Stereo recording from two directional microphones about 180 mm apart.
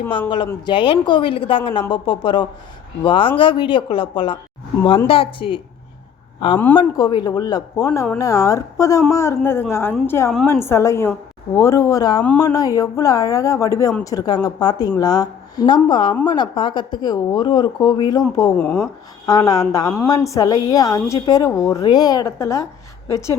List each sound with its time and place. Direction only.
0.6 s a woman's voice: 25° left (ahead or behind)
18.5 s speech: 5° left (ahead or behind)
19.2 s a woman's voice: 20° left (ahead or behind)